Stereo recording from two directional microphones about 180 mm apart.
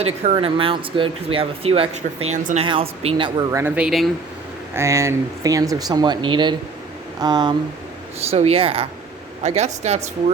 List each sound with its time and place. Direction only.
0.0 s speech: 35° right (ahead or behind)
2.6 s speech: 30° right (ahead or behind)
3.8 s speech: centre (ahead or behind)
4.7 s speech: 15° right (ahead or behind)
8.3 s speech: 35° right (ahead or behind)